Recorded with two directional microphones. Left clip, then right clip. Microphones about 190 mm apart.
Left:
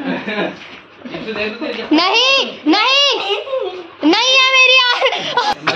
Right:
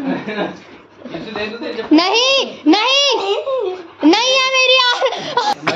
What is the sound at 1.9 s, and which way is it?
Speech, 30° right (ahead or behind).